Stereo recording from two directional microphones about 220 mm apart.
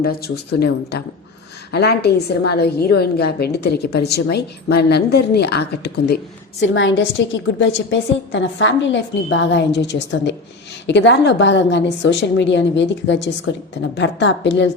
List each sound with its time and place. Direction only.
0.0 s a woman's voice: 45° left (ahead or behind)
6.6 s a woman's voice: 60° left (ahead or behind)